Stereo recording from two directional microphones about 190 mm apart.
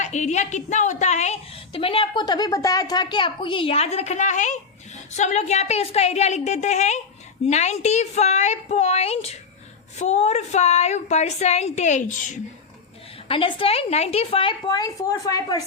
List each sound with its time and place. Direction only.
0.0 s a woman's voice: 40° left (ahead or behind)
13.2 s a woman's voice: 30° left (ahead or behind)